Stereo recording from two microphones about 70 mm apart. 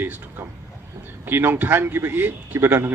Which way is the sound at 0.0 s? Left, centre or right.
Right.